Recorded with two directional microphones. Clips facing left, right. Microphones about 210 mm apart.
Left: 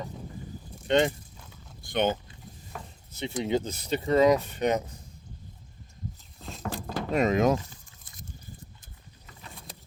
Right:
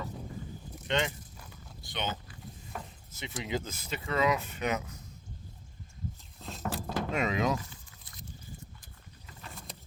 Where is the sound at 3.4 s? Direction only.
35° left (ahead or behind).